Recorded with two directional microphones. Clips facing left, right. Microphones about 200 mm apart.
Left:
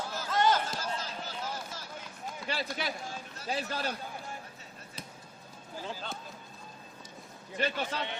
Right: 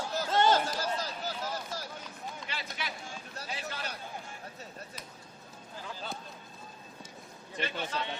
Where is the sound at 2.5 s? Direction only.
40° left (ahead or behind).